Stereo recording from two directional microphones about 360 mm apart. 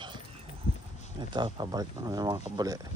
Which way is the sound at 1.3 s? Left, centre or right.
Centre.